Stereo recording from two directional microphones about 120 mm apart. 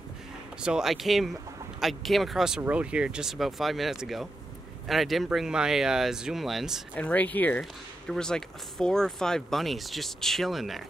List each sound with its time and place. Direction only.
0.6 s speech: 5° right (ahead or behind)
7.0 s speech: 15° left (ahead or behind)